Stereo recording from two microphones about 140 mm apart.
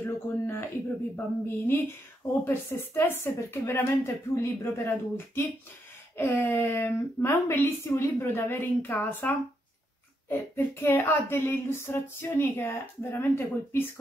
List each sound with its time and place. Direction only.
0.0 s speech: 15° left (ahead or behind)